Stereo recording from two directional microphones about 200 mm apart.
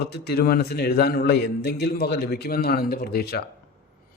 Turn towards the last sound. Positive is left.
turn(degrees=50)  # may be behind; listen again after turning